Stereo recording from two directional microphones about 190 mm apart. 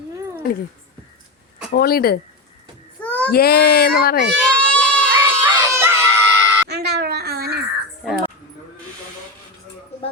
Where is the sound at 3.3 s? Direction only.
55° left (ahead or behind).